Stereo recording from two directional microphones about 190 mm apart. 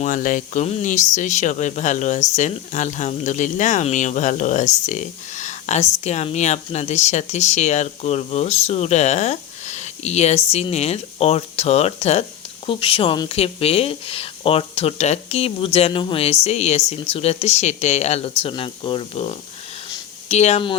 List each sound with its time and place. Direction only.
0.0 s speech: 40° left (ahead or behind)